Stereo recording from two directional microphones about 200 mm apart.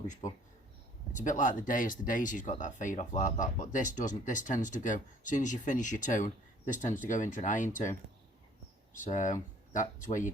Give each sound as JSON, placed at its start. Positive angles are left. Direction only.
{"t": 0.2, "sound": "speech", "side_deg": 40}